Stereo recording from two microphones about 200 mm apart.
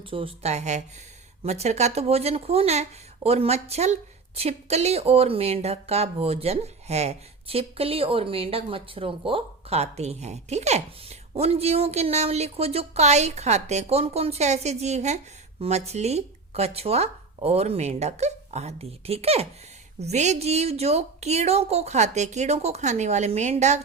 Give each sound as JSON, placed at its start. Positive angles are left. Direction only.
{"t": 0.0, "sound": "speech", "side_deg": -25}